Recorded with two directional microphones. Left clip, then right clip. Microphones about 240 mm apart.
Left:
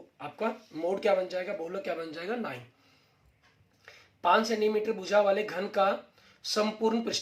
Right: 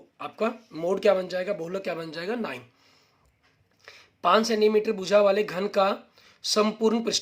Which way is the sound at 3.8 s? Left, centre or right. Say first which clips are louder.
Right 3 dB; right.